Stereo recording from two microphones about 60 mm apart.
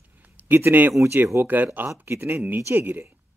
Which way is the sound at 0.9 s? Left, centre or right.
Right.